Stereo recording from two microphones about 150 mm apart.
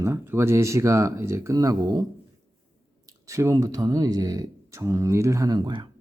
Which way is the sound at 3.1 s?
20° right (ahead or behind).